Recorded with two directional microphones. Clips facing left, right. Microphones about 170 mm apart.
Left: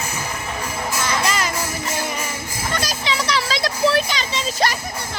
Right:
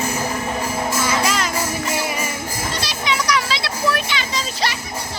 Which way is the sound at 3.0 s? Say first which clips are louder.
Right 3 dB; 30° left (ahead or behind).